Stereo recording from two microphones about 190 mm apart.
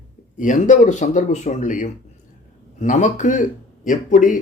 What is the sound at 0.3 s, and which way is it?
Speech, 40° left (ahead or behind).